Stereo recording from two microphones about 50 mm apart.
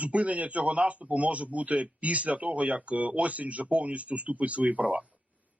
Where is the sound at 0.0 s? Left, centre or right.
Right.